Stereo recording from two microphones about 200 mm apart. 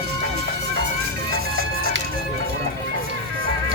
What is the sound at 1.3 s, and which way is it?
Music, 50° right (ahead or behind).